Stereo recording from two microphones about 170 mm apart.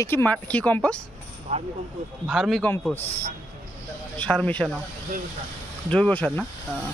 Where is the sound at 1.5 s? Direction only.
40° right (ahead or behind).